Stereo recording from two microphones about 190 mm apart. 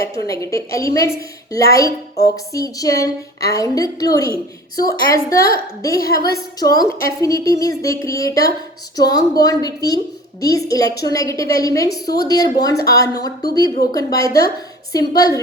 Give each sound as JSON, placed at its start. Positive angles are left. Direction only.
{"t": 0.0, "sound": "a woman's voice", "side_deg": 15}